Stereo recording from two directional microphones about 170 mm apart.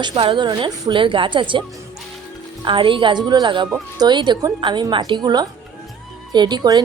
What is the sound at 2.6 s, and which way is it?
A woman's voice, 30° right (ahead or behind).